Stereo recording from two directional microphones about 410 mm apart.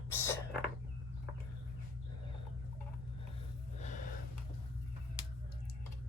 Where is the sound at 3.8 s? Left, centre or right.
Centre.